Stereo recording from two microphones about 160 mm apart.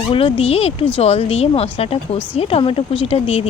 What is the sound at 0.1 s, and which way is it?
Speech, 35° left (ahead or behind).